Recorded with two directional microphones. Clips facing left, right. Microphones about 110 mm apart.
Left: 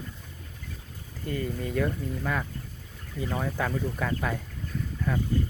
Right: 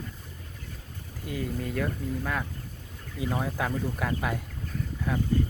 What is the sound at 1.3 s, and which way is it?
Speech, centre (ahead or behind).